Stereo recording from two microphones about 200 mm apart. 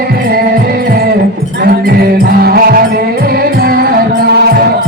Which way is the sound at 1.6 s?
50° right (ahead or behind).